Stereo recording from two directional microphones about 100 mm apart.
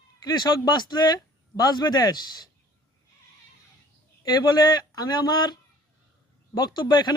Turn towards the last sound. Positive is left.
turn(degrees=45)  # may be behind; listen again after turning